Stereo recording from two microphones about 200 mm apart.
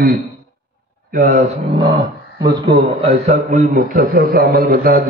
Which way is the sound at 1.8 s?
25° right (ahead or behind).